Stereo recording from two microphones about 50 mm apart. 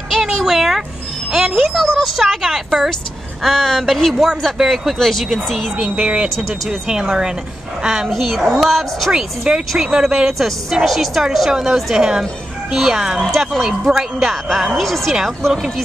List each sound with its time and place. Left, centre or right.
0.1 s a sound: centre
1.9 s a woman's voice: centre
3.4 s speech: centre
5.8 s a woman's voice: centre
6.2 s speech: centre
7.8 s a woman's voice: centre
8.1 s speech: centre
9.1 s a woman's voice: centre
10.7 s a woman's voice: centre